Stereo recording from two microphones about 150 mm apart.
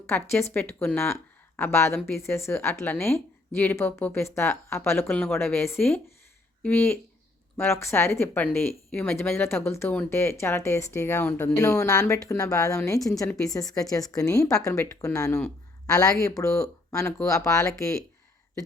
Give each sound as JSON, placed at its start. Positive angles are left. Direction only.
{"t": 0.1, "sound": "a woman's voice", "side_deg": 10}